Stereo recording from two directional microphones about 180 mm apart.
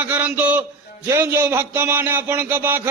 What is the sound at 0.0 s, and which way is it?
A man's voice, 10° right (ahead or behind).